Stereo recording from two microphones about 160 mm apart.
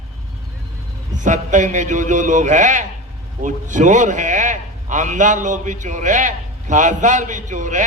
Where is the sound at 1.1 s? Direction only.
50° right (ahead or behind).